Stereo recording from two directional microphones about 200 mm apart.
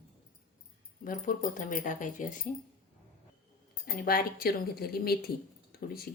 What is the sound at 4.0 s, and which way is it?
Speech, 50° left (ahead or behind).